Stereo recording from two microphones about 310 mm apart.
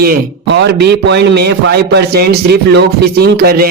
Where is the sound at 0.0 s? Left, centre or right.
Right.